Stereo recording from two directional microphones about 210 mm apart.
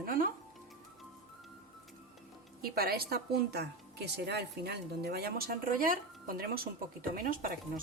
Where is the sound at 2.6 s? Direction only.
45° right (ahead or behind).